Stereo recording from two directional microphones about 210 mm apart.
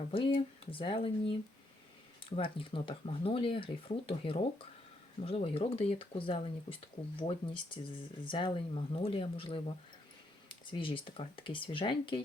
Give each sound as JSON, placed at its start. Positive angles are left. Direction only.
{"t": 0.1, "sound": "speech", "side_deg": 25}